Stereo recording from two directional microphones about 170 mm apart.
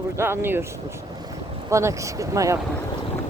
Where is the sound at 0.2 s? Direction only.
15° right (ahead or behind).